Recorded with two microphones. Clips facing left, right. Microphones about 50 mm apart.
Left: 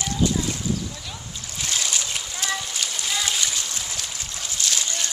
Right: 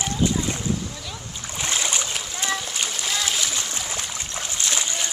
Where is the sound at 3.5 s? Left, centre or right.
Right.